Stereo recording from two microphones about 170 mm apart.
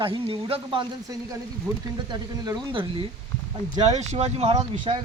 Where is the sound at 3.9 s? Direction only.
40° right (ahead or behind).